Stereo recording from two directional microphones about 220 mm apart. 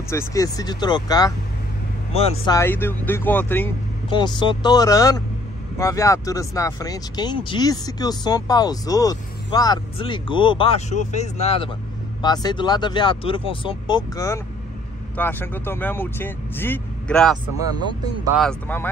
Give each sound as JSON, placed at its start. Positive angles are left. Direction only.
{"t": 0.1, "sound": "speech", "side_deg": 15}
{"t": 2.4, "sound": "speech", "side_deg": 15}
{"t": 4.1, "sound": "speech", "side_deg": 20}